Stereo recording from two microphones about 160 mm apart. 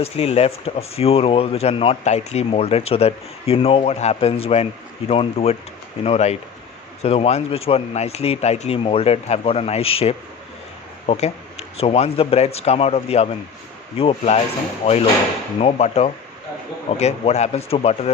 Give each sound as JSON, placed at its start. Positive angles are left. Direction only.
{"t": 0.0, "sound": "speech", "side_deg": 40}